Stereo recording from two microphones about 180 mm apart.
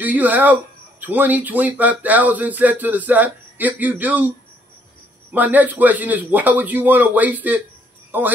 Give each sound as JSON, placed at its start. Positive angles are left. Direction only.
{"t": 0.0, "sound": "speech", "side_deg": -10}
{"t": 5.3, "sound": "speech", "side_deg": -10}